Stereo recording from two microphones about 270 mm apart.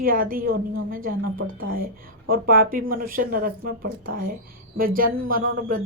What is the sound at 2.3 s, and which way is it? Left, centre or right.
Speech, right.